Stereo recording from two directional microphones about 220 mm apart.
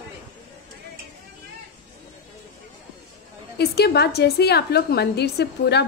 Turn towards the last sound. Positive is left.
turn(degrees=50)  # may be behind; listen again after turning